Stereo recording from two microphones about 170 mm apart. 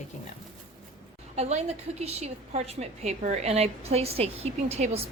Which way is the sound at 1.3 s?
40° right (ahead or behind).